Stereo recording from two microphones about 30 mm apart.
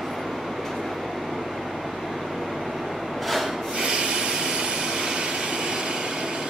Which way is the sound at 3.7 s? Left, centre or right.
Right.